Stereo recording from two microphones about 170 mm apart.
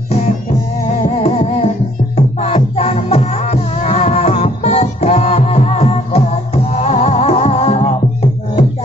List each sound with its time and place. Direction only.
0.8 s music: 40° left (ahead or behind)